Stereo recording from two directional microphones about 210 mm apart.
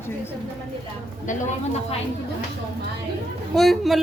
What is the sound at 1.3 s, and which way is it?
Speech, 35° left (ahead or behind).